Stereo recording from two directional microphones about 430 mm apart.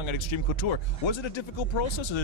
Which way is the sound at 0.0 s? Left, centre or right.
Left.